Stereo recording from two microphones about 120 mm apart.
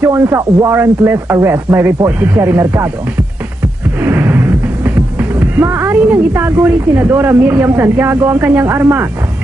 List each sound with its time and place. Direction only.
0.0 s a woman's voice: 25° right (ahead or behind)
5.4 s a woman's voice: 15° right (ahead or behind)